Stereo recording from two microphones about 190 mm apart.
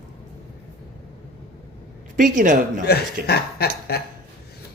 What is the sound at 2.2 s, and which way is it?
Speech, 45° right (ahead or behind).